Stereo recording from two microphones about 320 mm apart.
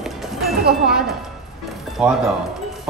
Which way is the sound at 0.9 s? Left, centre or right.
Centre.